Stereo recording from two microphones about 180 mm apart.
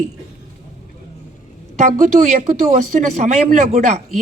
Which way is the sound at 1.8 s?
45° right (ahead or behind).